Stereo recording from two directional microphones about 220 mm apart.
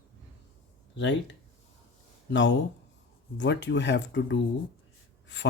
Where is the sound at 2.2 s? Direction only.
55° left (ahead or behind).